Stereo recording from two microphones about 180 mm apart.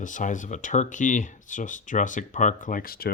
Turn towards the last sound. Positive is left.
turn(degrees=55)  # may be behind; listen again after turning